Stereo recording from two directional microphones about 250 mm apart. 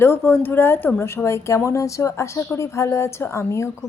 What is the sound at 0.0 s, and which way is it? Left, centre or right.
Speech, centre.